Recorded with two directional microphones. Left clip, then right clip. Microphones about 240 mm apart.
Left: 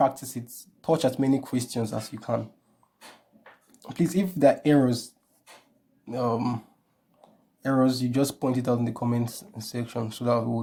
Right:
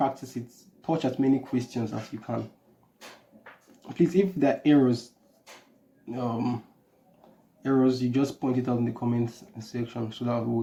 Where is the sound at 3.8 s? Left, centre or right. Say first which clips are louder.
Right 4 dB; left.